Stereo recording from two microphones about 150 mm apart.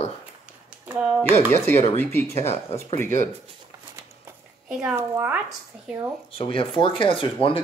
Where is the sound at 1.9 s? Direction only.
15° left (ahead or behind).